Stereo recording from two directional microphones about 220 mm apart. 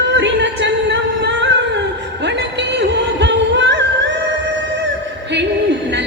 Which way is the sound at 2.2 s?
50° right (ahead or behind).